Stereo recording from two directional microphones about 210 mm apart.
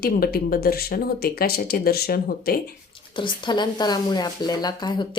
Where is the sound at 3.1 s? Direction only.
20° left (ahead or behind).